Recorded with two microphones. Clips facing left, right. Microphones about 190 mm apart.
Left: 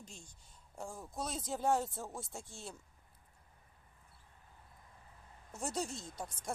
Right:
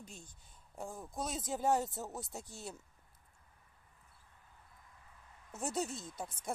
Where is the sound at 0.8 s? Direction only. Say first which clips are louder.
Right 1 dB; centre (ahead or behind).